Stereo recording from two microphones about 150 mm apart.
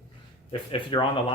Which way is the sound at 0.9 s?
35° left (ahead or behind).